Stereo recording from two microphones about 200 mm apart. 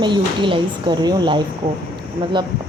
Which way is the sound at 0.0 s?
25° right (ahead or behind).